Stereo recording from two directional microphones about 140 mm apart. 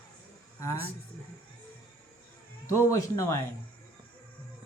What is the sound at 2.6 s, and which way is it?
Speech, 20° left (ahead or behind).